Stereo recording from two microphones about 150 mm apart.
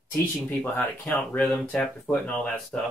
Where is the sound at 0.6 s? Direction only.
15° left (ahead or behind).